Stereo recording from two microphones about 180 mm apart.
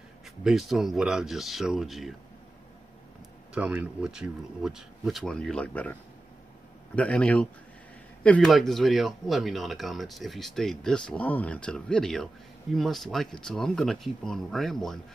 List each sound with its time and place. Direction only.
0.4 s speech: centre (ahead or behind)
3.5 s speech: 5° right (ahead or behind)
7.0 s speech: 5° left (ahead or behind)